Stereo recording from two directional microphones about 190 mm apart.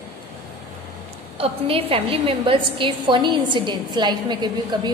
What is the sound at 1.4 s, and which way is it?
A woman's voice, 30° right (ahead or behind).